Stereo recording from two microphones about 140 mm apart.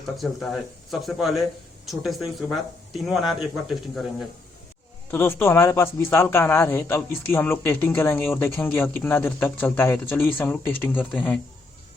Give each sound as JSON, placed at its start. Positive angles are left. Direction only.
{"t": 0.2, "sound": "speech", "side_deg": 0}
{"t": 5.1, "sound": "a man's voice", "side_deg": 15}